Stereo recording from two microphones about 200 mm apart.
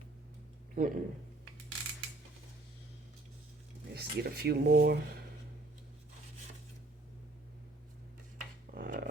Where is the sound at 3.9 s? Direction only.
50° right (ahead or behind).